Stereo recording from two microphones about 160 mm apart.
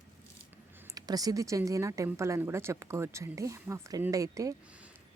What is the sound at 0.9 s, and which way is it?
A woman's voice, 25° right (ahead or behind).